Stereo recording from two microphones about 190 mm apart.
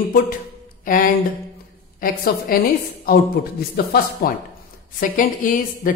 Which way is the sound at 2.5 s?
50° left (ahead or behind).